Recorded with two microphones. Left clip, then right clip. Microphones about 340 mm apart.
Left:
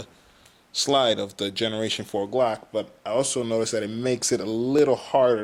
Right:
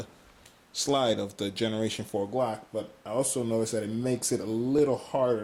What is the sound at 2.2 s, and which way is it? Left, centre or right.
Speech, centre.